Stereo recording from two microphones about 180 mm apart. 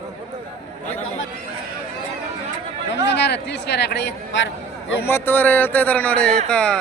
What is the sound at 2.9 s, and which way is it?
Speech, 70° left (ahead or behind).